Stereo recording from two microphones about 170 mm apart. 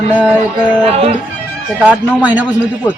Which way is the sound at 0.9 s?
35° right (ahead or behind).